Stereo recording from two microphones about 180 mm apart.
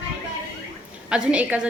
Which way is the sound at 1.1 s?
5° right (ahead or behind).